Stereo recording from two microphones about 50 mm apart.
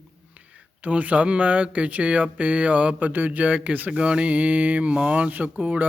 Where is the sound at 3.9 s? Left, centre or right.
Centre.